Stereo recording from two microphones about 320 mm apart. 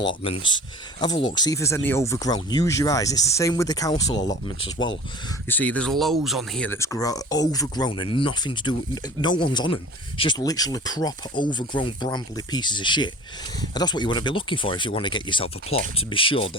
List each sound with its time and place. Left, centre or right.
0.1 s speech: centre